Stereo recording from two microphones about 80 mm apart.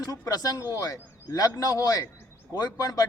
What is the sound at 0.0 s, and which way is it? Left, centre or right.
A man's voice, left.